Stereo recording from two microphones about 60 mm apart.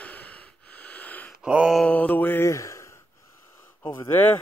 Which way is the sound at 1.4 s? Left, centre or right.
Centre.